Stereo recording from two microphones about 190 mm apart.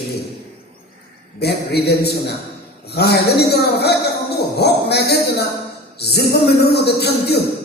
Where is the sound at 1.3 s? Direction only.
60° left (ahead or behind).